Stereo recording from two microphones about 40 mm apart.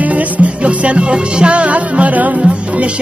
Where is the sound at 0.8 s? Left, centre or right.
Right.